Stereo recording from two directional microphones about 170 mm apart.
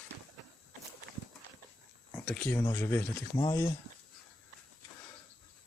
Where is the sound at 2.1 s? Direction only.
10° left (ahead or behind).